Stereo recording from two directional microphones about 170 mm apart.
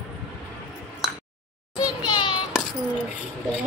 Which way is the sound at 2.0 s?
30° left (ahead or behind).